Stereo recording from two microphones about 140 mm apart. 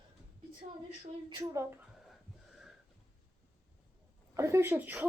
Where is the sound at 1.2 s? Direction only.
25° right (ahead or behind).